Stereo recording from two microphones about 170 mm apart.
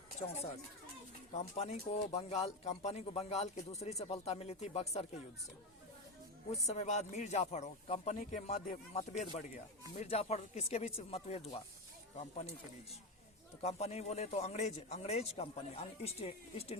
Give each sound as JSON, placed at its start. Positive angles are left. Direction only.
{"t": 0.2, "sound": "speech", "side_deg": 40}
{"t": 6.5, "sound": "speech", "side_deg": 40}
{"t": 13.6, "sound": "speech", "side_deg": 40}